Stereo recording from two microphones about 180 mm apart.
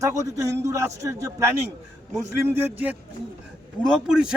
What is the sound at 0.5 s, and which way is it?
Speech, 15° right (ahead or behind).